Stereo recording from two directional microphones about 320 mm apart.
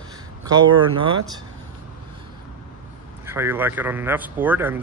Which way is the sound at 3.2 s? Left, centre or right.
Centre.